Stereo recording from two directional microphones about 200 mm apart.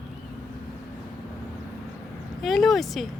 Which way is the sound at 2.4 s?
Centre (ahead or behind).